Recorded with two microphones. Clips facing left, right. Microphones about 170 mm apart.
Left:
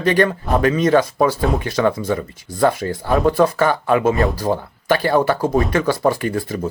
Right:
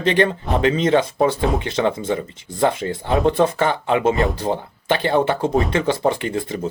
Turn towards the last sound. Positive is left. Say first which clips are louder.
# left 2 dB
turn(degrees=-25)  # may be behind; listen again after turning